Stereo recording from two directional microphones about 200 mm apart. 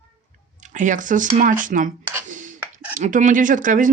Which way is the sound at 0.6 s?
40° right (ahead or behind).